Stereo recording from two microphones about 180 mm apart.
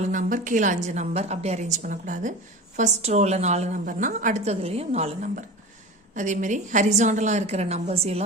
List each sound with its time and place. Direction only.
0.1 s a woman's voice: 45° right (ahead or behind)